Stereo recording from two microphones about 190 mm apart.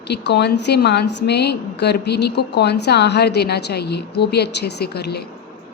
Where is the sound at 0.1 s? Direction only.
60° left (ahead or behind).